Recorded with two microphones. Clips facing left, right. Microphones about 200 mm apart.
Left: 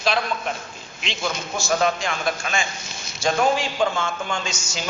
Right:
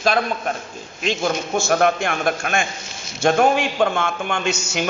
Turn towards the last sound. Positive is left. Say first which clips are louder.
# right 6 dB
turn(degrees=-60)  # may be behind; listen again after turning